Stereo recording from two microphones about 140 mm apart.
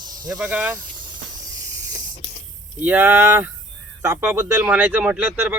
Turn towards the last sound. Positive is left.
turn(degrees=-10)  # may be behind; listen again after turning